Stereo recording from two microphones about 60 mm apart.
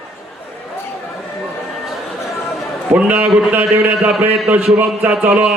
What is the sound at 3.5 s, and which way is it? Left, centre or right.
A man's voice, right.